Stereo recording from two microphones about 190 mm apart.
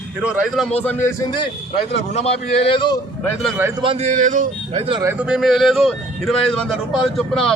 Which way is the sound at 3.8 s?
30° right (ahead or behind).